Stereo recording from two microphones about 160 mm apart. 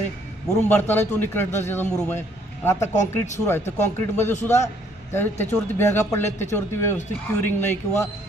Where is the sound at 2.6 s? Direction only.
15° left (ahead or behind).